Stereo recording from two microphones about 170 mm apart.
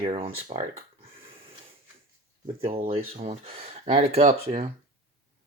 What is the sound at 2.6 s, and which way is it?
Speech, 35° right (ahead or behind).